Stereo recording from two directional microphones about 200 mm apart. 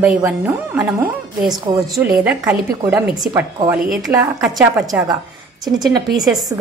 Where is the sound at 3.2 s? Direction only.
20° right (ahead or behind).